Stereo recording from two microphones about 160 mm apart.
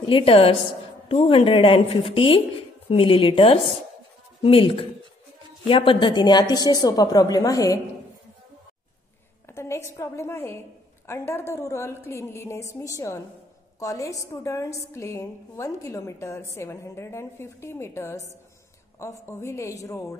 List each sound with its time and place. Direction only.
0.0 s a woman's voice: 35° left (ahead or behind)
9.5 s a woman's voice: 15° left (ahead or behind)